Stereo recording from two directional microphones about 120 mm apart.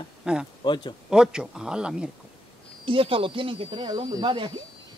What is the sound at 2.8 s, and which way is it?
Speech, 45° right (ahead or behind).